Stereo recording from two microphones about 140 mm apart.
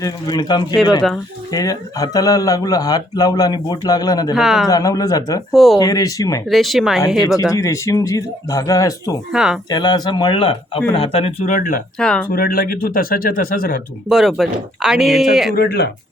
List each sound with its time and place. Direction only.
0.0 s speech: 30° left (ahead or behind)
4.4 s speech: centre (ahead or behind)
4.7 s speech: 25° left (ahead or behind)
5.5 s speech: centre (ahead or behind)
5.8 s speech: 25° left (ahead or behind)
6.5 s speech: centre (ahead or behind)
7.5 s speech: 20° left (ahead or behind)
9.3 s speech: 5° right (ahead or behind)
9.6 s speech: 30° left (ahead or behind)
11.4 s speech: 70° left (ahead or behind)
11.9 s speech: 5° left (ahead or behind)
12.3 s speech: 90° left
14.1 s speech: centre (ahead or behind)